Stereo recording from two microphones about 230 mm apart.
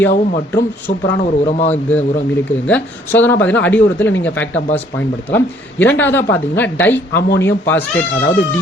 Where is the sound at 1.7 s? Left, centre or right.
Centre.